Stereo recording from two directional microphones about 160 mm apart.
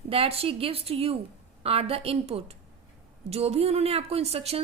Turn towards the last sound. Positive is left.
turn(degrees=-40)  # may be behind; listen again after turning